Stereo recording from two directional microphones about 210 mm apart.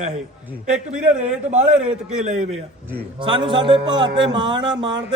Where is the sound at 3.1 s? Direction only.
25° right (ahead or behind).